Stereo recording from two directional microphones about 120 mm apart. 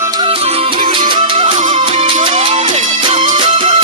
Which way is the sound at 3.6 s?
70° right (ahead or behind).